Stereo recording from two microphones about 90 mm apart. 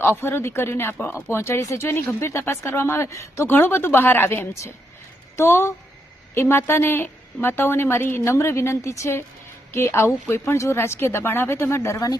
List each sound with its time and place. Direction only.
0.0 s speech: 25° left (ahead or behind)